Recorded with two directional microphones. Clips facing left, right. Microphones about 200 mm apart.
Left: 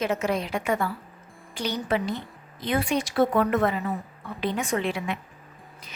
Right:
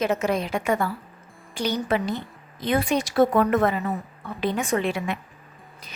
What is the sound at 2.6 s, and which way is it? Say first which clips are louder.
Speech: right 2 dB; 45° right (ahead or behind).